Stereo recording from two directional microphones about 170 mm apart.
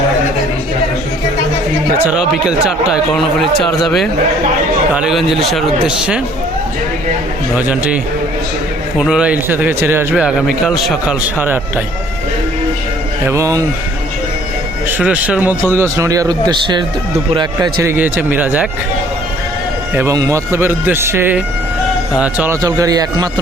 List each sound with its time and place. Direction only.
2.0 s speech: 5° right (ahead or behind)
7.5 s a man's voice: 5° right (ahead or behind)
9.0 s a man's voice: 5° right (ahead or behind)
11.3 s a man's voice: 10° right (ahead or behind)
13.2 s a man's voice: 15° right (ahead or behind)
14.8 s a man's voice: 10° right (ahead or behind); by 16.8 s 25° right (ahead or behind)
17.8 s a man's voice: 10° right (ahead or behind)
19.9 s a man's voice: 15° right (ahead or behind)
22.6 s speech: 20° right (ahead or behind)